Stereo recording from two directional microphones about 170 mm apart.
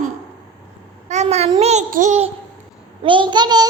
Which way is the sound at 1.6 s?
40° right (ahead or behind).